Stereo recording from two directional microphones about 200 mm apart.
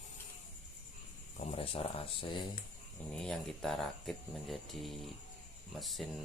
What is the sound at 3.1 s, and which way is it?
Speech, centre (ahead or behind).